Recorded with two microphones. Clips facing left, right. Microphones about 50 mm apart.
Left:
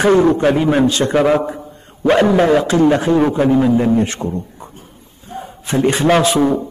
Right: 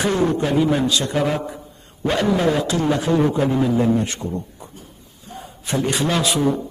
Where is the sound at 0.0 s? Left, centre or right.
Left.